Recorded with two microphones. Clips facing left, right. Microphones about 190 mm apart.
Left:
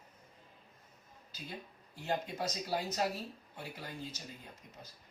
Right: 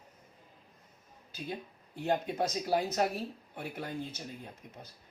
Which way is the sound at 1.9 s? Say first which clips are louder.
Right 5 dB; 55° right (ahead or behind).